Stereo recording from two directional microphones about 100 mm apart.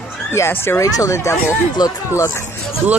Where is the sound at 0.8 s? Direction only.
35° left (ahead or behind).